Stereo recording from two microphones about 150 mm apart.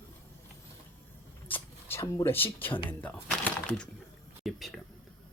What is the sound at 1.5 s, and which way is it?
Speech, 15° left (ahead or behind).